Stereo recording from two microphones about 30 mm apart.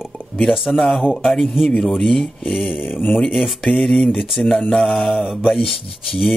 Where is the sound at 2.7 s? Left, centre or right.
Left.